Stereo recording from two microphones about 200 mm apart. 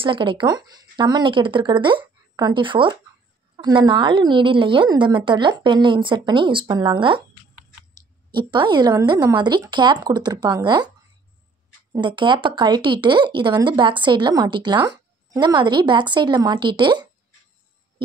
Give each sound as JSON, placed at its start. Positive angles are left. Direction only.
{"t": 0.0, "sound": "speech", "side_deg": -25}
{"t": 11.9, "sound": "speech", "side_deg": -25}